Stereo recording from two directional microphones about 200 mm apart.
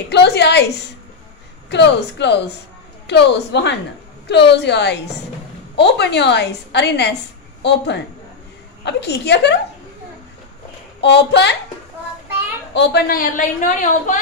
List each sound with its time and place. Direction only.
0.1 s a woman's voice: 55° left (ahead or behind)
11.0 s a woman's voice: 60° left (ahead or behind)
12.7 s a woman's voice: 50° left (ahead or behind)